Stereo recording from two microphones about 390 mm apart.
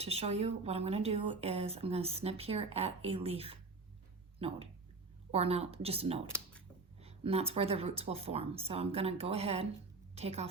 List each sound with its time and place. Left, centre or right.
0.0 s speech: centre